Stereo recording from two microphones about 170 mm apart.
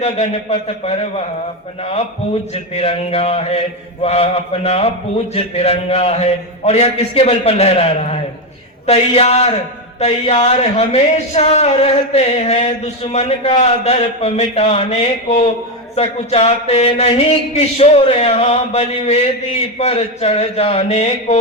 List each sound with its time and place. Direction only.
0.0 s a man's voice: 40° left (ahead or behind)